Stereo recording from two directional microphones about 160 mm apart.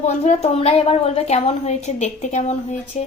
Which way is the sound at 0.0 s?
40° left (ahead or behind).